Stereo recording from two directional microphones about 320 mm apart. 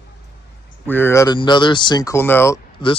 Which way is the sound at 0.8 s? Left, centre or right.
Centre.